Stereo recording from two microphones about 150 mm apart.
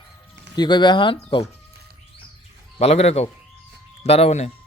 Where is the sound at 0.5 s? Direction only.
30° left (ahead or behind).